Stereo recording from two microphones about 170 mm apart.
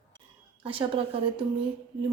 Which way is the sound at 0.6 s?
30° right (ahead or behind).